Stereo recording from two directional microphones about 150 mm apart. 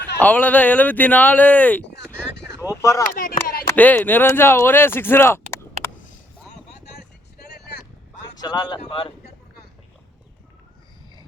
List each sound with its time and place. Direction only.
0.2 s speech: 10° left (ahead or behind)
2.1 s a sound: 5° left (ahead or behind)
2.6 s speech: 20° left (ahead or behind)
3.2 s speech: 70° left (ahead or behind)
3.7 s speech: 10° left (ahead or behind)
7.3 s vehicle: 90° left
8.4 s speech: 30° left (ahead or behind)